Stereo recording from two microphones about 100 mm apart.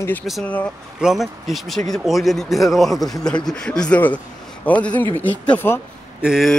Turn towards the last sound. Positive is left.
turn(degrees=-5)  # may be behind; listen again after turning